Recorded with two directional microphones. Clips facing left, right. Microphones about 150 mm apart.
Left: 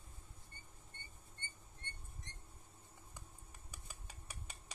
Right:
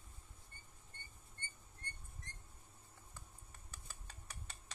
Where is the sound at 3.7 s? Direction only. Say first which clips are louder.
Left 1 dB; 10° left (ahead or behind).